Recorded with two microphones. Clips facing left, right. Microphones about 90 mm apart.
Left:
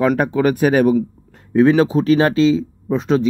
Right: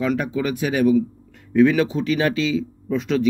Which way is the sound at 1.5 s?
35° left (ahead or behind).